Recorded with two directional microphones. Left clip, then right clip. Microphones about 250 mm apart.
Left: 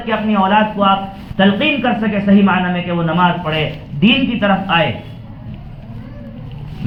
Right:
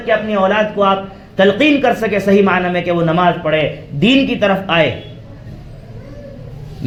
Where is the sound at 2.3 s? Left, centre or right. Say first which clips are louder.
Right 2 dB; right.